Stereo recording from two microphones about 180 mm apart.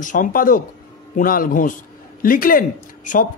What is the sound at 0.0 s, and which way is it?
Speech, 50° left (ahead or behind).